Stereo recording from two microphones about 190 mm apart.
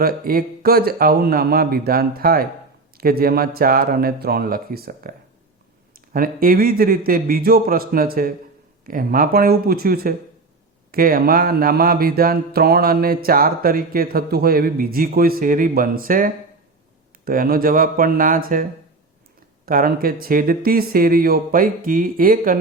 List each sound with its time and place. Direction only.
0.0 s speech: 50° right (ahead or behind)
19.6 s speech: 50° right (ahead or behind)